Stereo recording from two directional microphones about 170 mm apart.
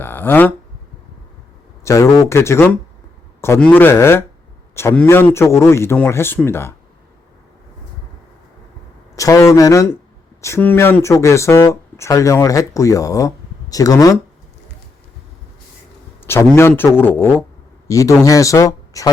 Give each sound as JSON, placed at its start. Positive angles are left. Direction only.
{"t": 0.0, "sound": "a sound", "side_deg": 10}
{"t": 1.8, "sound": "a man's voice", "side_deg": 20}
{"t": 9.1, "sound": "speech", "side_deg": 20}
{"t": 16.2, "sound": "a man's voice", "side_deg": 15}